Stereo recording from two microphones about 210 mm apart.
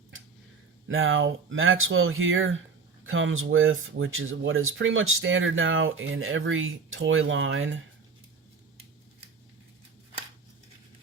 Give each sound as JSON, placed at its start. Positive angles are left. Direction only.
{"t": 0.9, "sound": "speech", "side_deg": -65}